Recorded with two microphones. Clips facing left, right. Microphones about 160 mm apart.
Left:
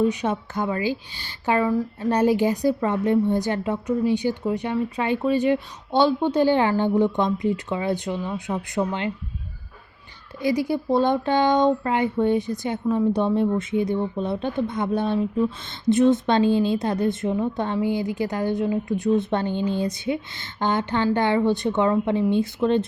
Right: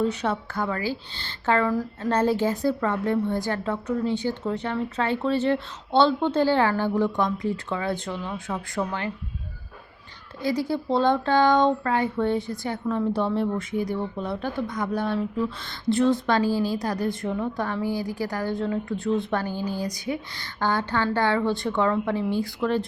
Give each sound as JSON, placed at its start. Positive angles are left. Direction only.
{"t": 0.0, "sound": "a woman's voice", "side_deg": 15}
{"t": 10.4, "sound": "speech", "side_deg": 15}